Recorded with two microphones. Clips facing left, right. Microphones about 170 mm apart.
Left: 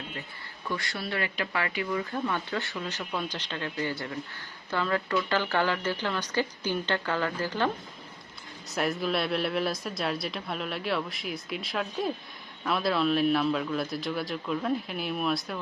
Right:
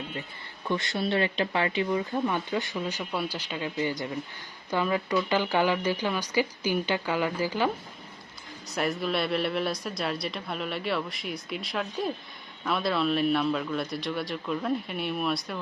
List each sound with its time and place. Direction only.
0.7 s speech: 25° right (ahead or behind)
8.7 s a woman's voice: centre (ahead or behind)